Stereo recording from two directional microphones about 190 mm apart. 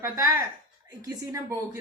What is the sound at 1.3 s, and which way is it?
Speech, 15° right (ahead or behind).